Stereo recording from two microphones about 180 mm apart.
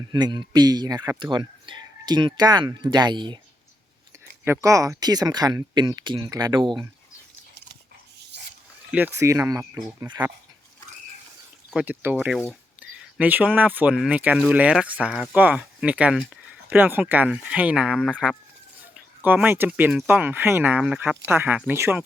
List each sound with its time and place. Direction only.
0.0 s speech: 25° right (ahead or behind)
4.4 s speech: 15° right (ahead or behind)
8.9 s speech: 10° right (ahead or behind)
11.7 s speech: 10° right (ahead or behind)